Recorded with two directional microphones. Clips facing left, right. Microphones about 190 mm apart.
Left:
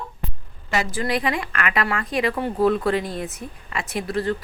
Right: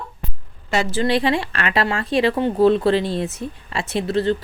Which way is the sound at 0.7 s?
30° right (ahead or behind).